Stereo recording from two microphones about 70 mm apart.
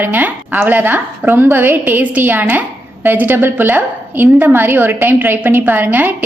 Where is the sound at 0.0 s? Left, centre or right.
Right.